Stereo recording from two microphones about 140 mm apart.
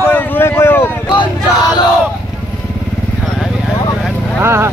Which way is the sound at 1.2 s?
30° left (ahead or behind).